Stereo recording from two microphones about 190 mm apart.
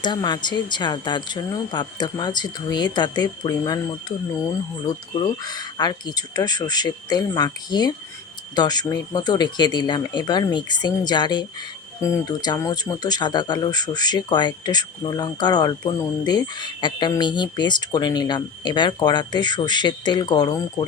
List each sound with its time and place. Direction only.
0.0 s speech: 25° left (ahead or behind)
5.4 s speech: 20° left (ahead or behind)